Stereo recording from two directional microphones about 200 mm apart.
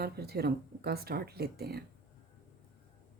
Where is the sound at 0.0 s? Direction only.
50° right (ahead or behind).